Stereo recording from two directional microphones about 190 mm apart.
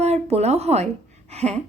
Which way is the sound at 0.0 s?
35° right (ahead or behind).